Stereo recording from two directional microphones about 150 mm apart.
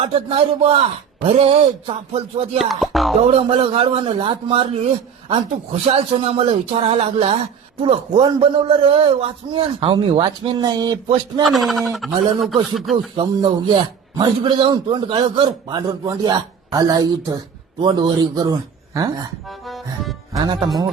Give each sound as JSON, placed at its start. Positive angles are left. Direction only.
{"t": 0.0, "sound": "a man's voice", "side_deg": -40}
{"t": 2.6, "sound": "speech", "side_deg": 0}
{"t": 3.2, "sound": "a man's voice", "side_deg": -40}
{"t": 5.9, "sound": "a man's voice", "side_deg": -40}
{"t": 11.4, "sound": "speech", "side_deg": 0}
{"t": 13.1, "sound": "a man's voice", "side_deg": -35}
{"t": 19.5, "sound": "music", "side_deg": 0}
{"t": 20.3, "sound": "a man's voice", "side_deg": -25}